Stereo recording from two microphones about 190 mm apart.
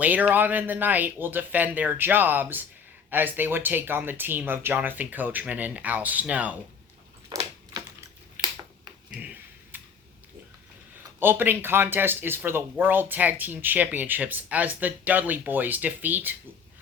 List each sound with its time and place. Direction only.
0.0 s speech: 10° right (ahead or behind)
7.3 s typewriter: 20° right (ahead or behind)
8.4 s a sound: 10° right (ahead or behind)
9.0 s speech: 5° right (ahead or behind)
9.7 s a sound: 10° right (ahead or behind)
11.2 s speech: 10° right (ahead or behind)